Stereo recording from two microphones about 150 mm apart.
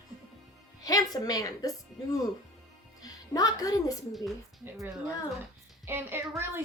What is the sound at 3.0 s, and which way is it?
Speech, 25° left (ahead or behind).